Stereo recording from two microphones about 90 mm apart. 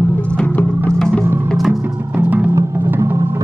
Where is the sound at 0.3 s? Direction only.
10° left (ahead or behind).